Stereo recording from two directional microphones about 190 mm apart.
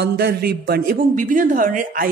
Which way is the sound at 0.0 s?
60° right (ahead or behind).